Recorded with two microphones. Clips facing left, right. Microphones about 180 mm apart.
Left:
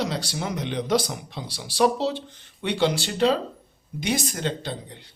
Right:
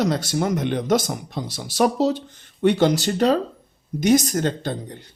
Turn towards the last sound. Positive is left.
turn(degrees=-45)  # may be behind; listen again after turning